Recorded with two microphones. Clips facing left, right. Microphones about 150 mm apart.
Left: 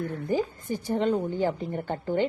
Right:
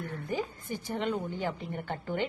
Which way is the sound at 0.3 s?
35° left (ahead or behind).